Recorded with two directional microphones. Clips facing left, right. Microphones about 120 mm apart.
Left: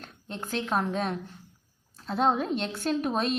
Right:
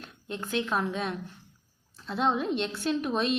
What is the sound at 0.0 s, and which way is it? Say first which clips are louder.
A woman's voice: right 1 dB; 35° left (ahead or behind).